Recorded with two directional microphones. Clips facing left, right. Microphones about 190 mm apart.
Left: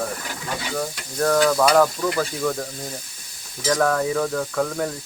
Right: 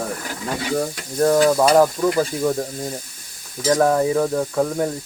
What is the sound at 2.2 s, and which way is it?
Sizzle, 25° right (ahead or behind).